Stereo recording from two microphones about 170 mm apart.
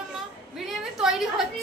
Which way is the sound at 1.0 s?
Centre (ahead or behind).